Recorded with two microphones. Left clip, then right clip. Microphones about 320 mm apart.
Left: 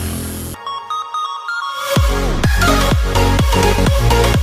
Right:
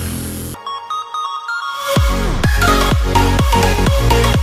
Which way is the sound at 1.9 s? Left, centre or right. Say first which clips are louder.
Even; centre.